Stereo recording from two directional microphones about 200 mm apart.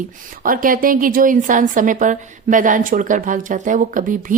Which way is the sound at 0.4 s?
45° right (ahead or behind).